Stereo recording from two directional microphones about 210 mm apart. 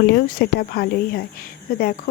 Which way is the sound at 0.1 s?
50° left (ahead or behind).